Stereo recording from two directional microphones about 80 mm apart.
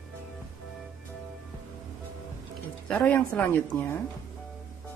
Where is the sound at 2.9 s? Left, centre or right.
Centre.